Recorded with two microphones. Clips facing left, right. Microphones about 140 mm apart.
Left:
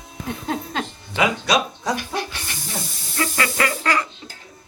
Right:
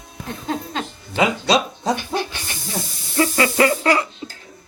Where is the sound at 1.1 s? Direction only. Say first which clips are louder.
Right 2 dB; 30° right (ahead or behind).